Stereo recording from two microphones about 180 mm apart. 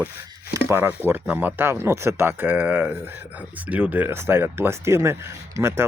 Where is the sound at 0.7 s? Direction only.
10° right (ahead or behind).